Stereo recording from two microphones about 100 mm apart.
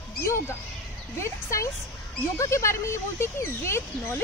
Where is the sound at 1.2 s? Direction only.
30° left (ahead or behind).